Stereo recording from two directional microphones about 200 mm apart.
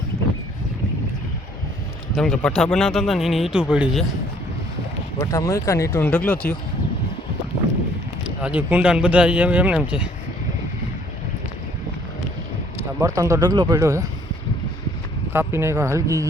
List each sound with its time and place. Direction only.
2.1 s speech: centre (ahead or behind)
5.2 s speech: 15° left (ahead or behind)
8.4 s speech: 5° right (ahead or behind)
13.0 s speech: 15° right (ahead or behind)
15.3 s speech: 10° right (ahead or behind)